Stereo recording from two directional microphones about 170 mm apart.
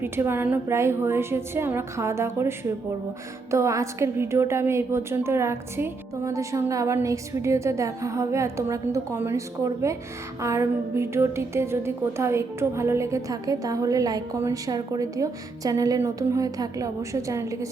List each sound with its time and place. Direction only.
0.0 s a woman's voice: 15° right (ahead or behind)